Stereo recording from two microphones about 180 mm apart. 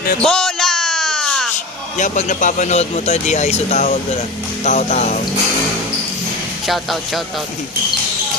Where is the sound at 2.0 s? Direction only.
40° left (ahead or behind).